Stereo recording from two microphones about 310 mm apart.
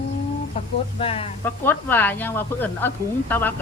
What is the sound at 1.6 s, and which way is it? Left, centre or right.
Speech, centre.